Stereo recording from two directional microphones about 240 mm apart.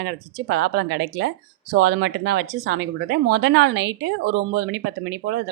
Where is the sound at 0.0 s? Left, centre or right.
Right.